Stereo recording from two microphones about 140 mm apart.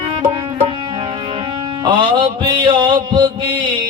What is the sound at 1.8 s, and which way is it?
Mantra, 35° right (ahead or behind).